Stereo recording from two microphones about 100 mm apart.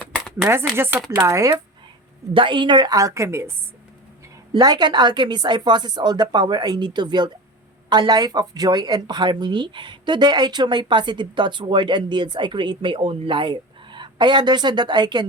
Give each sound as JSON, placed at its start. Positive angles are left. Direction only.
{"t": 0.0, "sound": "a sound", "side_deg": 15}
{"t": 0.8, "sound": "speech", "side_deg": -20}
{"t": 2.3, "sound": "a woman's voice", "side_deg": -55}
{"t": 4.5, "sound": "speech", "side_deg": -45}